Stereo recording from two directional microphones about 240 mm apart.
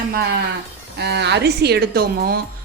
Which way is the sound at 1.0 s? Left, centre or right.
Right.